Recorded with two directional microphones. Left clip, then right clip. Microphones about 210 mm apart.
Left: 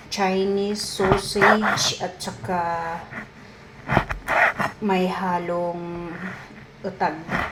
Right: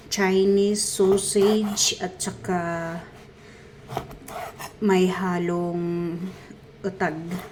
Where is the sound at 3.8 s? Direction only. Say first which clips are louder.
Left 12 dB; 45° left (ahead or behind).